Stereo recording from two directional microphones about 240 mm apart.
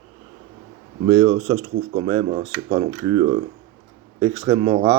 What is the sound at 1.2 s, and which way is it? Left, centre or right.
Speech, right.